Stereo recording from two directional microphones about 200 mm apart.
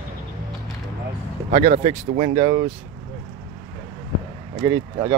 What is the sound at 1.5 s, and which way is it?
Speech, 35° right (ahead or behind).